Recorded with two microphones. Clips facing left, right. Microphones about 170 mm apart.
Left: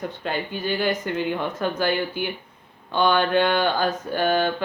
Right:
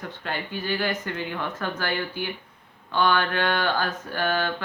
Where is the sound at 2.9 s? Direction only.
20° left (ahead or behind).